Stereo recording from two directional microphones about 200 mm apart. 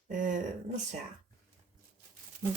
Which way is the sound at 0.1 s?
40° right (ahead or behind).